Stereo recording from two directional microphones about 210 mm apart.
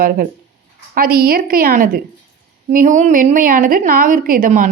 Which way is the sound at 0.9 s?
45° right (ahead or behind).